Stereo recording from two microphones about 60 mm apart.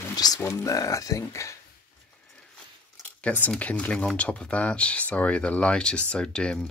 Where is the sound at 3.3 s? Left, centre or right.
Left.